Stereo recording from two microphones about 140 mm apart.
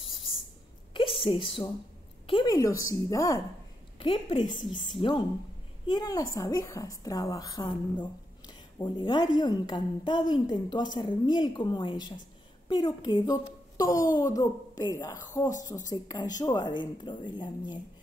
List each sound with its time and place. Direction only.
0.9 s a sound: 40° left (ahead or behind)
2.2 s a woman's voice: 30° left (ahead or behind)
4.0 s a woman's voice: 40° left (ahead or behind)